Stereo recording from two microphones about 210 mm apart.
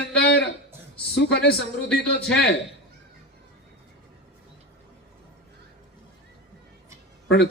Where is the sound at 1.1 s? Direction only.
50° left (ahead or behind).